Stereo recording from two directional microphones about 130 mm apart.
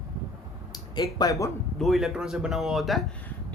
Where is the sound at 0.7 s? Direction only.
30° left (ahead or behind).